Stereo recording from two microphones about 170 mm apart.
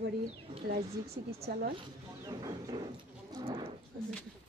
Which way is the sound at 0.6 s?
40° right (ahead or behind).